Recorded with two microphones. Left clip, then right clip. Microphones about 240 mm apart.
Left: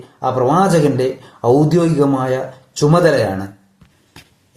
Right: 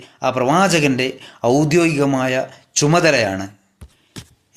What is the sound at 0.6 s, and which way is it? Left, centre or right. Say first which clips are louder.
A man's voice: left 2 dB; right.